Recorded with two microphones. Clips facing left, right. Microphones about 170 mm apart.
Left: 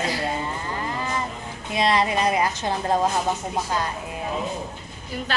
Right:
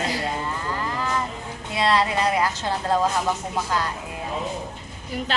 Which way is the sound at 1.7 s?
20° left (ahead or behind).